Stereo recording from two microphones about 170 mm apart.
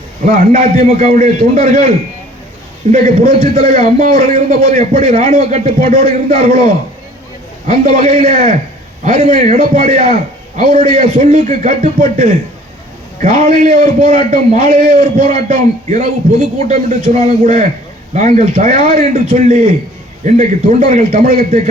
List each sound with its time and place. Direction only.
0.3 s a man's voice: 45° right (ahead or behind)
2.9 s a man's voice: 40° right (ahead or behind)
7.7 s a man's voice: 45° right (ahead or behind)